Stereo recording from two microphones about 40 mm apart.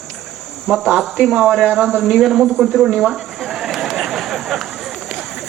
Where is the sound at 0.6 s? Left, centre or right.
Centre.